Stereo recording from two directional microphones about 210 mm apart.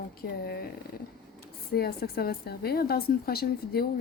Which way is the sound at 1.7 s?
50° left (ahead or behind).